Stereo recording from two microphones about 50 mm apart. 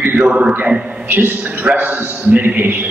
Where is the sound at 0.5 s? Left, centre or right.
Right.